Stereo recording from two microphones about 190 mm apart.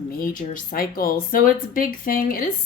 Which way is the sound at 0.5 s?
50° left (ahead or behind).